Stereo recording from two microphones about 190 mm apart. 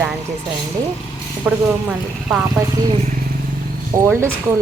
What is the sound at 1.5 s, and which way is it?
Speech, 5° right (ahead or behind).